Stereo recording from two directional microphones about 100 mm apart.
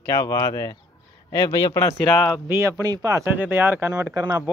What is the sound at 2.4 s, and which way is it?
Speech, 30° right (ahead or behind).